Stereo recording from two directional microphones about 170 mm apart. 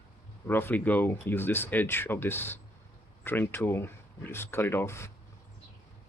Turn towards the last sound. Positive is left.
turn(degrees=15)  # may be behind; listen again after turning